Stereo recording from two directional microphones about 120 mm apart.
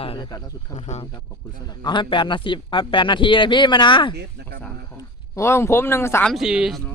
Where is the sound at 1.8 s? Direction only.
40° left (ahead or behind).